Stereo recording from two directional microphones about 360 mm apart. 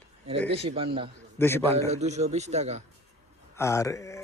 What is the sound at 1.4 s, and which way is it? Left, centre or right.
Speech, centre.